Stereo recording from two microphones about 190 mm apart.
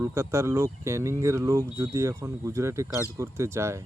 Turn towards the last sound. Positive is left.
turn(degrees=-15)  # may be behind; listen again after turning